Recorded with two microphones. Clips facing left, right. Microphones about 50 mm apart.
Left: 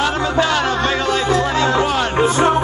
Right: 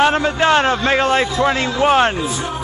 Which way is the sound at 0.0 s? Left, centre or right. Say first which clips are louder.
Right 3 dB; right.